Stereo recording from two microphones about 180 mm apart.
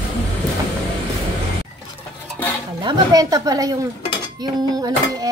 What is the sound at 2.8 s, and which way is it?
Speech, 20° right (ahead or behind).